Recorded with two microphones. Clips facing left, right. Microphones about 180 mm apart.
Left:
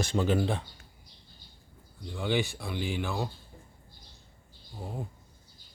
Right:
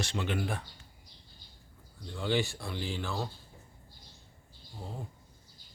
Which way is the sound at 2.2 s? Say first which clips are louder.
Left 1 dB; 15° left (ahead or behind).